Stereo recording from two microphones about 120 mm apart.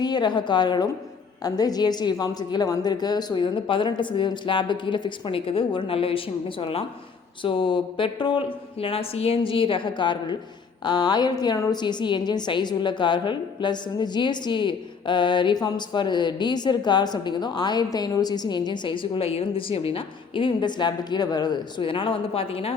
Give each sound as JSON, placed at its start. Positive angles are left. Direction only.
{"t": 0.0, "sound": "a woman's voice", "side_deg": 35}